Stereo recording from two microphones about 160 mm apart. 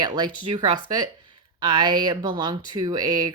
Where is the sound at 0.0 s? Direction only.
30° right (ahead or behind).